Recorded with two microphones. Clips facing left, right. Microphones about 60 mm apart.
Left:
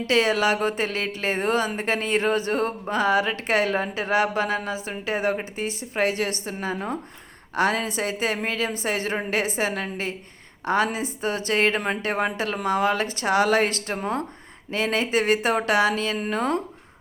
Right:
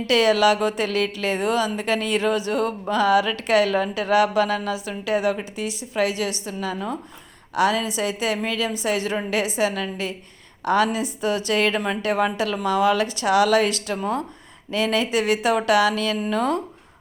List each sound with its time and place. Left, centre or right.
0.1 s speech: left